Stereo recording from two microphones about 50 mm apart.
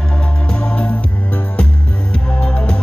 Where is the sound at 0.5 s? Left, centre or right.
Centre.